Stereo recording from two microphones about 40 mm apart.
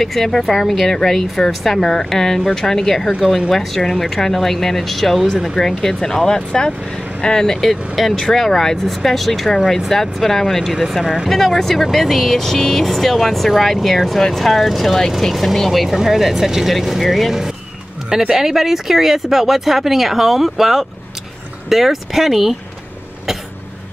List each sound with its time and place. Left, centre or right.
0.0 s speech: centre
3.2 s speech: centre
7.7 s speech: centre